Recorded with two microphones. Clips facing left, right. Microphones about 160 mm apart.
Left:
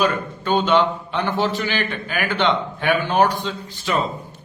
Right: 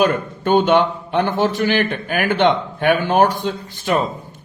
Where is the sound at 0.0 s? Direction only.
55° right (ahead or behind).